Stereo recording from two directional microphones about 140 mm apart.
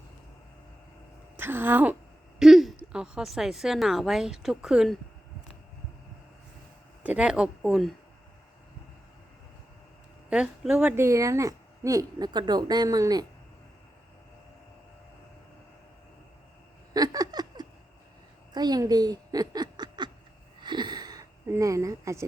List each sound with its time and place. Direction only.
1.4 s speech: 15° right (ahead or behind)
2.4 s a sound: centre (ahead or behind)
2.7 s a woman's voice: 5° right (ahead or behind)
7.0 s speech: 10° right (ahead or behind)
10.2 s speech: 5° right (ahead or behind)
10.9 s a woman's voice: 20° right (ahead or behind)
16.9 s a sound: 25° right (ahead or behind)
18.5 s speech: 30° right (ahead or behind)
20.6 s a sound: 30° right (ahead or behind)